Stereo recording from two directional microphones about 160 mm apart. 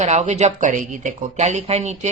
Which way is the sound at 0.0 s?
45° right (ahead or behind).